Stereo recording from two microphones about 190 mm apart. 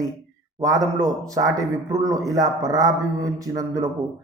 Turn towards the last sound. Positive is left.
turn(degrees=-20)  # may be behind; listen again after turning